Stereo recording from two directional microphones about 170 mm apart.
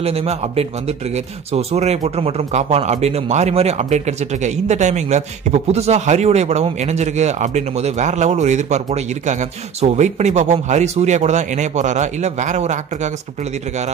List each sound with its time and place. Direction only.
0.0 s a man's voice: 35° right (ahead or behind)